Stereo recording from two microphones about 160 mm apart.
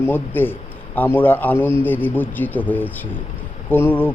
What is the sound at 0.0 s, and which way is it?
Speech, 10° left (ahead or behind).